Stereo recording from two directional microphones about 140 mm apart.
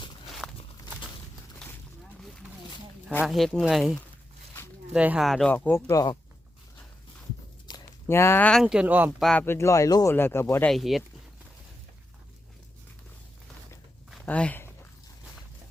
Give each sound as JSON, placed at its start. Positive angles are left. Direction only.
{"t": 0.4, "sound": "walk", "side_deg": 5}
{"t": 3.2, "sound": "speech", "side_deg": 0}
{"t": 4.9, "sound": "speech", "side_deg": -5}
{"t": 5.9, "sound": "speech", "side_deg": 25}
{"t": 7.7, "sound": "a sound", "side_deg": 30}
{"t": 8.0, "sound": "speech", "side_deg": 20}
{"t": 8.6, "sound": "speech", "side_deg": -5}
{"t": 9.2, "sound": "speech", "side_deg": 5}
{"t": 9.5, "sound": "speech", "side_deg": 20}
{"t": 10.8, "sound": "speech", "side_deg": 0}
{"t": 14.3, "sound": "speech", "side_deg": 10}